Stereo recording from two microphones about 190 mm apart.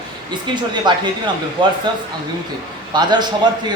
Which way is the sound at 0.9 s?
25° right (ahead or behind).